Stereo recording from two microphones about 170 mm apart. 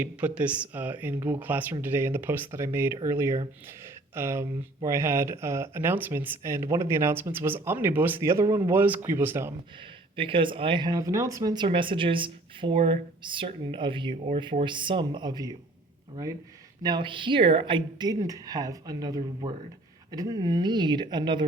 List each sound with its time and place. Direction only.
0.0 s speech: 10° right (ahead or behind)
10.2 s speech: 30° right (ahead or behind)
16.8 s speech: 25° right (ahead or behind)